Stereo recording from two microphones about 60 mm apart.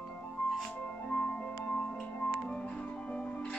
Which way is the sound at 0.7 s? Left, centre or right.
Centre.